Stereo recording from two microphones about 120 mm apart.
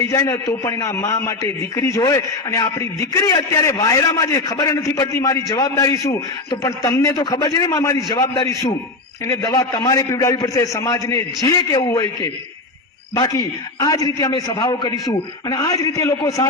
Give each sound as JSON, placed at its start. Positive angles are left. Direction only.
{"t": 0.1, "sound": "a man's voice", "side_deg": 35}
{"t": 7.2, "sound": "a man's voice", "side_deg": 35}
{"t": 8.1, "sound": "a man's voice", "side_deg": 40}